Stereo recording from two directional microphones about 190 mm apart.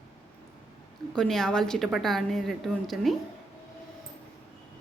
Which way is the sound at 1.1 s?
5° left (ahead or behind).